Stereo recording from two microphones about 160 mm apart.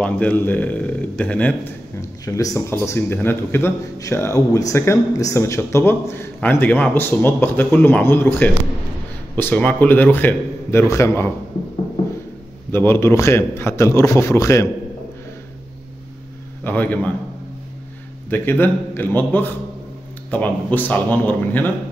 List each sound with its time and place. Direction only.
0.0 s a man's voice: 10° left (ahead or behind)
12.7 s a man's voice: 15° left (ahead or behind)
16.6 s a man's voice: 10° left (ahead or behind)
18.3 s a man's voice: 15° left (ahead or behind)